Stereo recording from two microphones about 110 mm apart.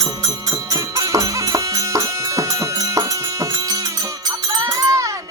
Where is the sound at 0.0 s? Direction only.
35° right (ahead or behind).